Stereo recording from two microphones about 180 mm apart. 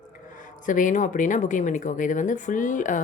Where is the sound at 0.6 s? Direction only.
45° left (ahead or behind).